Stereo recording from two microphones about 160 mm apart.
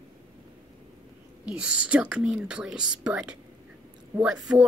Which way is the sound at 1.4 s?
5° right (ahead or behind).